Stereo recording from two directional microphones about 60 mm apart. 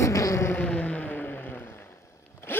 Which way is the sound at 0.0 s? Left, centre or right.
Left.